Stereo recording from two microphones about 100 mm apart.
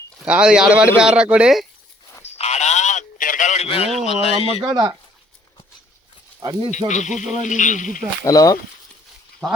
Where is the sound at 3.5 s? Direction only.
80° left.